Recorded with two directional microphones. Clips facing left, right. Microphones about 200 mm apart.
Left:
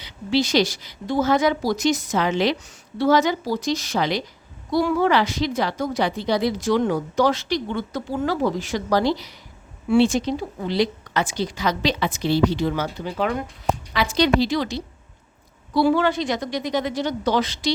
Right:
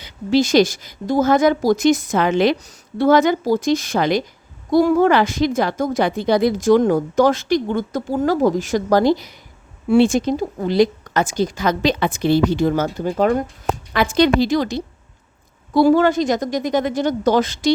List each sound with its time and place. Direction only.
0.0 s a woman's voice: 45° right (ahead or behind)